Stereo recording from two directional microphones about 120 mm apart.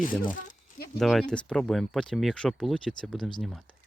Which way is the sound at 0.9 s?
Centre (ahead or behind).